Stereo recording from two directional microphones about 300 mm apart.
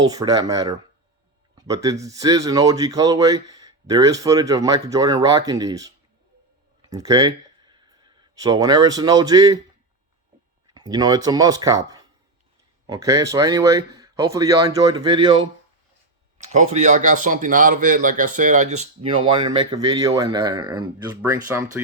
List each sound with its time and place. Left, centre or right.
0.0 s speech: centre
6.9 s speech: centre
10.8 s speech: centre
16.5 s speech: right